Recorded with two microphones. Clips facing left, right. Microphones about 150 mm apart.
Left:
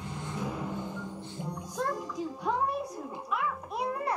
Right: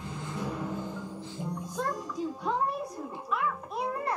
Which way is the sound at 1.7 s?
Centre (ahead or behind).